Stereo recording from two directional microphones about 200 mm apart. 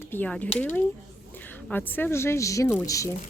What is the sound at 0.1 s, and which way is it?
Speech, 5° left (ahead or behind).